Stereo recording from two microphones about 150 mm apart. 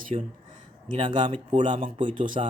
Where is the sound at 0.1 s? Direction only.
45° right (ahead or behind).